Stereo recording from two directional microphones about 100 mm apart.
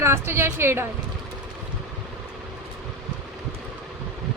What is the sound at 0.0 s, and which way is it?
Speech, 25° right (ahead or behind).